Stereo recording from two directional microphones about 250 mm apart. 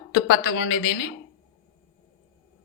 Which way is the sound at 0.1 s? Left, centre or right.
Left.